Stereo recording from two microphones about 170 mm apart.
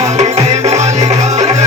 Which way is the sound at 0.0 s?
40° right (ahead or behind).